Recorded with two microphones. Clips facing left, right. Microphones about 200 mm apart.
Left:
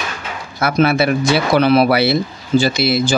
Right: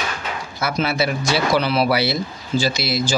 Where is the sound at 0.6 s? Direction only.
55° left (ahead or behind).